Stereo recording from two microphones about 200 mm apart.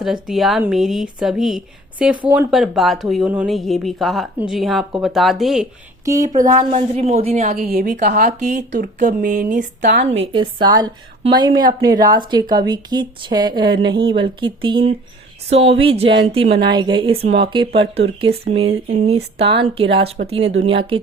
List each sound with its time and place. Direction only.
0.0 s speech: centre (ahead or behind)
6.1 s speech: 15° right (ahead or behind)
6.4 s speech: 40° right (ahead or behind)
8.5 s speech: 55° right (ahead or behind)
9.0 s speech: 40° right (ahead or behind)
9.8 s a woman's voice: 60° right (ahead or behind)
10.3 s a woman's voice: 25° right (ahead or behind)